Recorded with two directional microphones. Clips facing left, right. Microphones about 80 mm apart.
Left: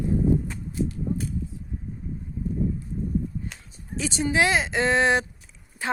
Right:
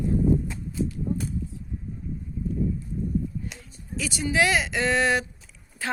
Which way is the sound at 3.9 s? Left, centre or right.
Left.